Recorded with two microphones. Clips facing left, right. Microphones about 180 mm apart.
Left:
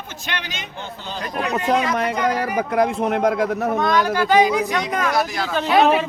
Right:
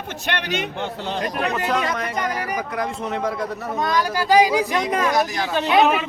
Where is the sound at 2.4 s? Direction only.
55° left (ahead or behind).